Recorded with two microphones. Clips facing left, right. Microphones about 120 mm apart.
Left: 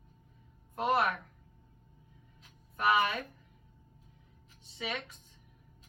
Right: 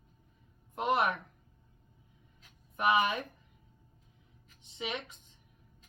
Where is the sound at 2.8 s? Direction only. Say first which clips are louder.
Right 1 dB; 20° right (ahead or behind).